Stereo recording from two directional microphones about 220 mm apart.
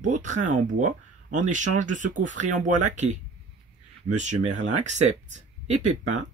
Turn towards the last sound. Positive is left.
turn(degrees=-35)  # may be behind; listen again after turning